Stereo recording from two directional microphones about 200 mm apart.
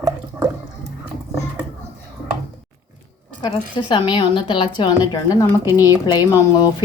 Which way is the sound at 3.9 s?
20° left (ahead or behind).